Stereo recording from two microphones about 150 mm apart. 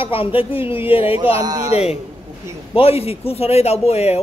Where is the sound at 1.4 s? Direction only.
25° right (ahead or behind).